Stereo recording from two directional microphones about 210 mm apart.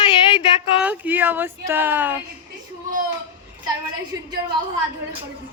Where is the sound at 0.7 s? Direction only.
5° right (ahead or behind).